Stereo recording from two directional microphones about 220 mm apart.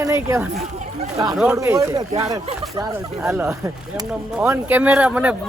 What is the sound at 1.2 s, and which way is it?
Speech, centre (ahead or behind).